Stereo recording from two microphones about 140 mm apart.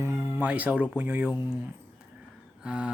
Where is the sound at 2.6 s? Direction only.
10° right (ahead or behind).